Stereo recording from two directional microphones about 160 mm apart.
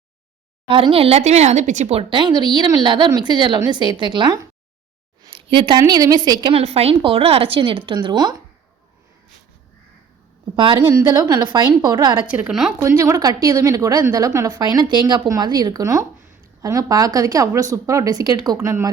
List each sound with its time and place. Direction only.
0.7 s speech: 35° right (ahead or behind)
5.2 s a sound: 30° right (ahead or behind)
5.8 s speech: 20° right (ahead or behind)
6.5 s speech: 40° right (ahead or behind)
10.5 s speech: 30° right (ahead or behind)
12.2 s speech: 5° right (ahead or behind)
13.0 s speech: 25° right (ahead or behind)